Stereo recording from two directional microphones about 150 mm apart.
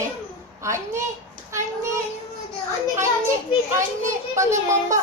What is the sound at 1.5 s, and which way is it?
Child singing, 20° right (ahead or behind).